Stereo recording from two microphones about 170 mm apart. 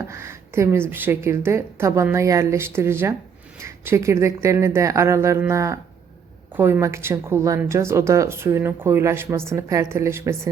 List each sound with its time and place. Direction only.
0.0 s a woman's voice: 15° right (ahead or behind)